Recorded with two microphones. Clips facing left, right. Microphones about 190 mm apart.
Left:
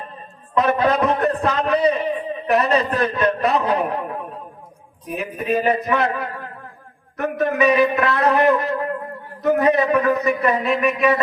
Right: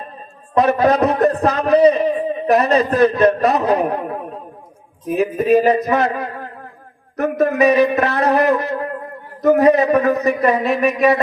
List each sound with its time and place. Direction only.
0.5 s a man's voice: 40° right (ahead or behind)
5.0 s a man's voice: 40° right (ahead or behind)